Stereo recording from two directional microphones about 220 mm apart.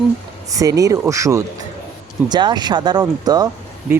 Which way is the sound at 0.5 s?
15° right (ahead or behind).